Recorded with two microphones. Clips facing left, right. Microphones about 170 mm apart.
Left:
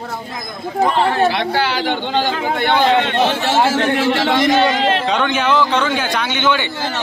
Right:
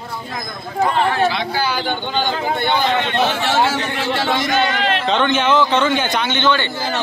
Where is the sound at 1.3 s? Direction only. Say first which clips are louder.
Left 3 dB; 70° left (ahead or behind); by 2.7 s 90° left.